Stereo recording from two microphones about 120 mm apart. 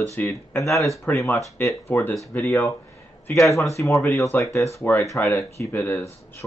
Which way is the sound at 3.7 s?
25° left (ahead or behind).